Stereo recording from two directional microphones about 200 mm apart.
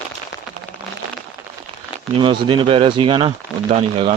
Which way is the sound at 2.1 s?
25° right (ahead or behind).